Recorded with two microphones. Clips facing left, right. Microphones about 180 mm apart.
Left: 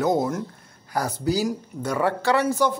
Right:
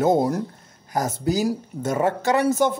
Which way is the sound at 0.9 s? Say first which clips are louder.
Right 1 dB; 20° right (ahead or behind).